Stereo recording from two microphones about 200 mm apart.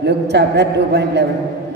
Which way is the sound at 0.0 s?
55° right (ahead or behind).